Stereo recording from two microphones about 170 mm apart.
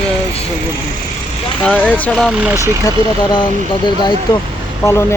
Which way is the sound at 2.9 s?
25° left (ahead or behind).